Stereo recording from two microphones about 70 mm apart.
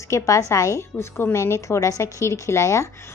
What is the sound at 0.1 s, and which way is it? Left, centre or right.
A woman's voice, left.